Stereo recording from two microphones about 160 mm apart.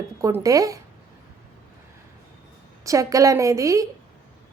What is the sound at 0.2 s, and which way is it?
Speech, 15° right (ahead or behind).